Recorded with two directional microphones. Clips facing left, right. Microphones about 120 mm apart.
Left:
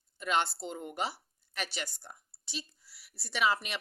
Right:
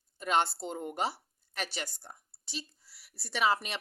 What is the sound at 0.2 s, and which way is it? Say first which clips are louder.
Speech: right 2 dB; 40° right (ahead or behind).